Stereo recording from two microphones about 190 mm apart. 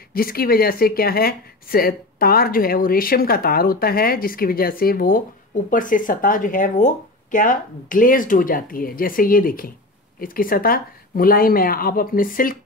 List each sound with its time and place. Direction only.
0.1 s speech: 50° left (ahead or behind)